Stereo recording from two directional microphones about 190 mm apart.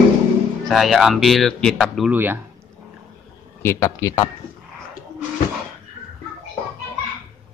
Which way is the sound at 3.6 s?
15° left (ahead or behind).